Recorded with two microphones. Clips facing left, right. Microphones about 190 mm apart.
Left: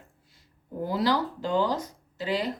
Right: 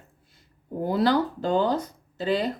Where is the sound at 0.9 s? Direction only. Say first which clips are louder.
Right 4 dB; 55° right (ahead or behind).